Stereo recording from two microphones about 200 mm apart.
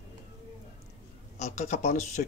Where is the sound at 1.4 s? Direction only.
35° left (ahead or behind).